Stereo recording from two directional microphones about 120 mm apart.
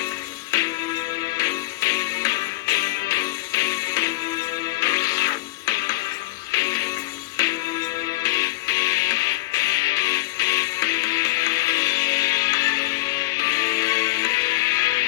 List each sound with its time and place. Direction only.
0.5 s music: 30° left (ahead or behind)